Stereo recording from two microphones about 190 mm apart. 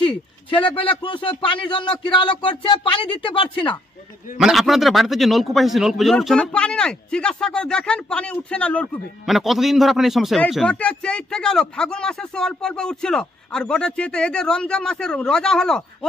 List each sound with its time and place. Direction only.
0.0 s speech: 30° left (ahead or behind)
4.4 s a man's voice: centre (ahead or behind)